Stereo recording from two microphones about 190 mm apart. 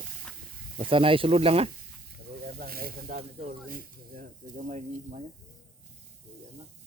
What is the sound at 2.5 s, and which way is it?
Speech, 50° right (ahead or behind).